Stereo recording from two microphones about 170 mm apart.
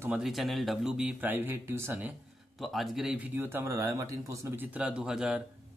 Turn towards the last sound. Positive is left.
turn(degrees=-5)  # may be behind; listen again after turning